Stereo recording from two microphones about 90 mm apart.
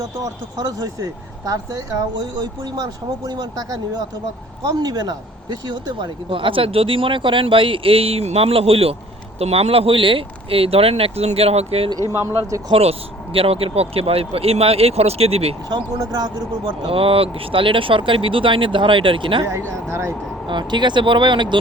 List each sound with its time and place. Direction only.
0.2 s speech: 40° right (ahead or behind)
3.2 s speech: 45° right (ahead or behind); by 11.9 s 90° right
12.1 s speech: 35° right (ahead or behind)
12.7 s speech: 90° right
16.8 s speech: 90° right; by 19.4 s 70° right (ahead or behind)
19.5 s speech: 30° right (ahead or behind)
20.5 s speech: 60° right (ahead or behind)